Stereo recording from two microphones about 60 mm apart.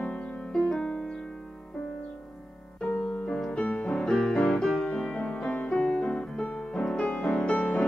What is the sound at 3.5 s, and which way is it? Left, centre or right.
Music, centre.